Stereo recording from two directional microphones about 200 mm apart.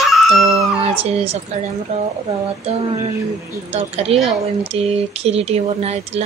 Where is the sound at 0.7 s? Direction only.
30° right (ahead or behind).